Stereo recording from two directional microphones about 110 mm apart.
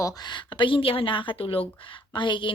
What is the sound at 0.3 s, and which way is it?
A woman's voice, 45° left (ahead or behind).